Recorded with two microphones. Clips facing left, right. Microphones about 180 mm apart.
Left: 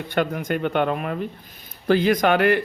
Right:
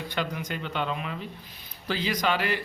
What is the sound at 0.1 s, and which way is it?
Speech, 55° left (ahead or behind).